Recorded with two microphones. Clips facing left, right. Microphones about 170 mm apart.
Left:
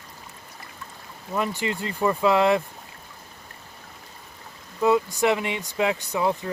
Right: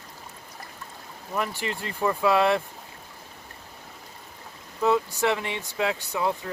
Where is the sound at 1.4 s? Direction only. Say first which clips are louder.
Left 5 dB; 15° left (ahead or behind).